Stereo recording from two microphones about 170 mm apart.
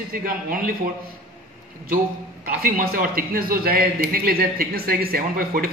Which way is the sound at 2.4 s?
60° right (ahead or behind).